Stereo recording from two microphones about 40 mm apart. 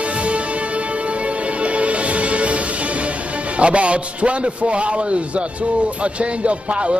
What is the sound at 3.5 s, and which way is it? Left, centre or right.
A man's voice, right.